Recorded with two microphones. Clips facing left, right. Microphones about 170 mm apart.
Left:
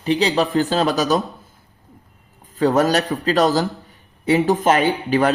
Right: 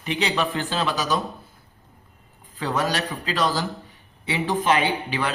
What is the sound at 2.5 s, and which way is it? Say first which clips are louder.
Speech: left 9 dB; 45° left (ahead or behind).